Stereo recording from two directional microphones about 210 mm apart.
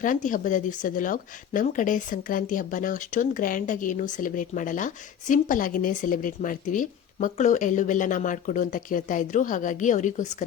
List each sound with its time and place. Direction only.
0.0 s speech: 40° left (ahead or behind)